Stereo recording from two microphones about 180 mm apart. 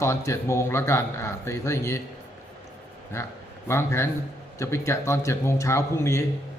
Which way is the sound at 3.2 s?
15° left (ahead or behind).